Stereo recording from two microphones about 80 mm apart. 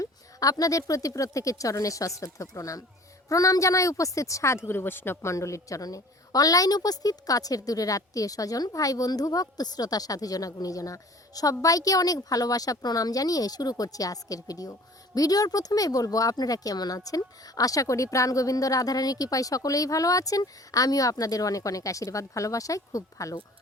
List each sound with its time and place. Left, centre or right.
0.0 s speech: left